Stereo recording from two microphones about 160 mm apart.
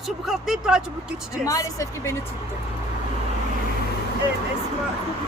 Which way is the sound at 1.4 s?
20° left (ahead or behind).